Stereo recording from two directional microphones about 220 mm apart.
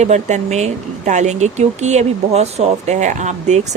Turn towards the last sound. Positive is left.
turn(degrees=-35)  # may be behind; listen again after turning